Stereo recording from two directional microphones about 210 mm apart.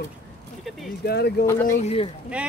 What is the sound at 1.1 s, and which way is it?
Speech, 50° left (ahead or behind).